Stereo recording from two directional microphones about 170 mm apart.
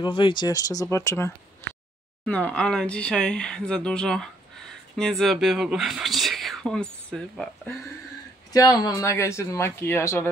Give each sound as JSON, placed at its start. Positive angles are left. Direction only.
{"t": 0.0, "sound": "speech", "side_deg": 30}
{"t": 8.5, "sound": "speech", "side_deg": 20}